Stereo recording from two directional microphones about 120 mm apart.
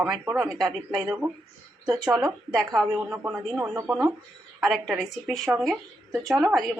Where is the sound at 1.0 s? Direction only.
20° right (ahead or behind).